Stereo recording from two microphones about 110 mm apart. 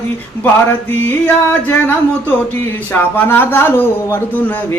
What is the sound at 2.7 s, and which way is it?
A man's voice, 15° left (ahead or behind).